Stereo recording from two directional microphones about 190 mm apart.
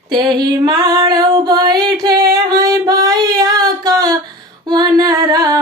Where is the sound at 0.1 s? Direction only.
20° right (ahead or behind).